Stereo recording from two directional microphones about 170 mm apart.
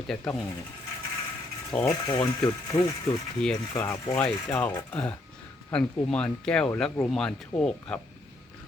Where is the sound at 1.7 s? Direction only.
10° left (ahead or behind).